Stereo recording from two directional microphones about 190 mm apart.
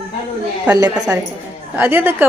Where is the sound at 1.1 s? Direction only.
15° right (ahead or behind).